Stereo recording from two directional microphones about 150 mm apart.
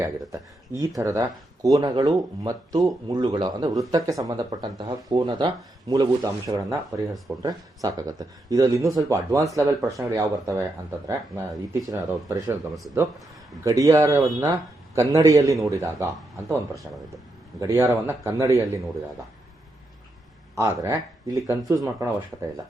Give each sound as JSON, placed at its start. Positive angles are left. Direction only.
{"t": 0.0, "sound": "speech", "side_deg": -20}
{"t": 13.7, "sound": "speech", "side_deg": -20}
{"t": 17.6, "sound": "speech", "side_deg": -20}
{"t": 20.6, "sound": "speech", "side_deg": -20}